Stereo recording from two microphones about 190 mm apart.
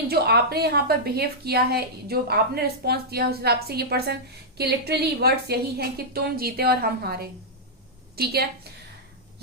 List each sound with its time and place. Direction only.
0.1 s a woman's voice: 55° right (ahead or behind)